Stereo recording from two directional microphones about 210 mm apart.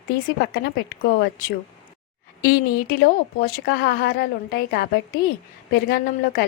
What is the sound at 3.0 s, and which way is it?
A woman's voice, 45° left (ahead or behind).